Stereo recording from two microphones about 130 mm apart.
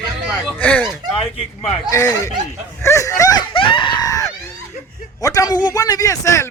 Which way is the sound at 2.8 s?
25° left (ahead or behind).